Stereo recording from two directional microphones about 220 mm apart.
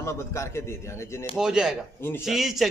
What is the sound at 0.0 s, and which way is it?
Speech, 10° left (ahead or behind).